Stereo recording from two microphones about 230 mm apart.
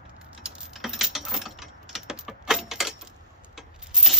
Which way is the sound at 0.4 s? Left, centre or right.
Centre.